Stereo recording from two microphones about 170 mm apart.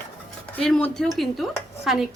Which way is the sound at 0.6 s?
5° left (ahead or behind).